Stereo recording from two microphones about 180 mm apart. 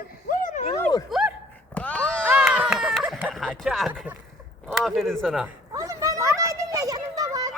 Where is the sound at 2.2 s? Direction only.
10° right (ahead or behind).